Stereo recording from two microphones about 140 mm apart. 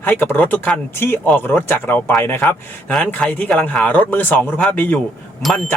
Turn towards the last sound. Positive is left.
turn(degrees=0)  # may be behind; listen again after turning